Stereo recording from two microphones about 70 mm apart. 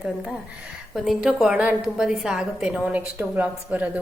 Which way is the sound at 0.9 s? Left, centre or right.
Centre.